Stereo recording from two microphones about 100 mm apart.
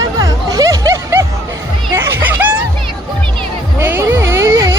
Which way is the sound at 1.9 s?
25° right (ahead or behind).